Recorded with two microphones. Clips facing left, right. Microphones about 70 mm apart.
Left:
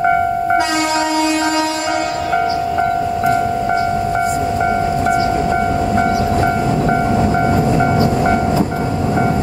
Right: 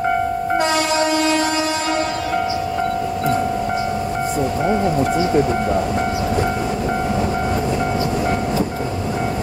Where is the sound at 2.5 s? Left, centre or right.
Left.